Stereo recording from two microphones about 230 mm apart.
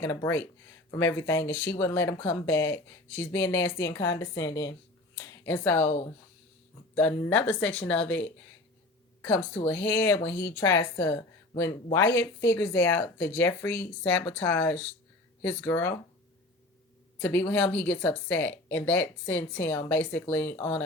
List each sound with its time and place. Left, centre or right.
0.0 s speech: centre
6.9 s speech: centre
17.2 s speech: centre